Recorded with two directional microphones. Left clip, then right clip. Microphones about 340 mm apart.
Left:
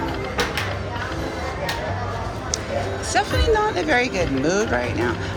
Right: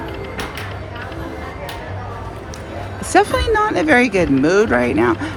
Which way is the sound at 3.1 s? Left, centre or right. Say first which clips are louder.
Right 6 dB; centre.